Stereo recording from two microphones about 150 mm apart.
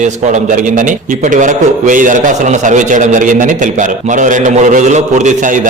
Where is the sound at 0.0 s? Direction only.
55° right (ahead or behind).